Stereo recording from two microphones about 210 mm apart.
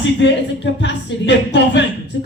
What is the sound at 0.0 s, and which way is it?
Speech, 60° left (ahead or behind).